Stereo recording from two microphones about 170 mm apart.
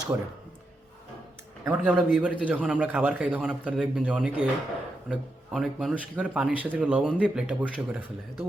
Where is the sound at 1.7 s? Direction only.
5° right (ahead or behind).